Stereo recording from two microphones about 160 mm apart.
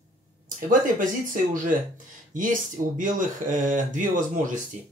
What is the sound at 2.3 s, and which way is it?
Speech, 55° right (ahead or behind).